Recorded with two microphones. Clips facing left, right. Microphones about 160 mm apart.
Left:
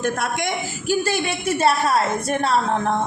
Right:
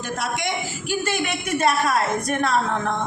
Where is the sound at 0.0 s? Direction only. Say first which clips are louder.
Left 4 dB; 55° left (ahead or behind).